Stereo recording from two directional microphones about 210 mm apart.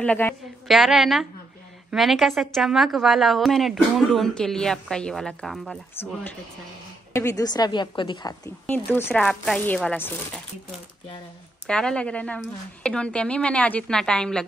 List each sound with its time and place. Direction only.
0.0 s a woman's voice: 5° left (ahead or behind)
7.1 s a woman's voice: 15° left (ahead or behind)
8.6 s speech: 10° left (ahead or behind)
11.6 s a woman's voice: 5° left (ahead or behind)